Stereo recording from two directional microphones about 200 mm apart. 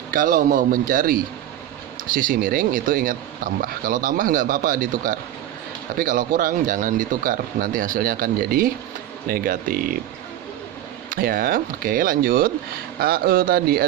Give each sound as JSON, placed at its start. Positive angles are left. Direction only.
{"t": 0.1, "sound": "speech", "side_deg": -40}
{"t": 11.1, "sound": "speech", "side_deg": -45}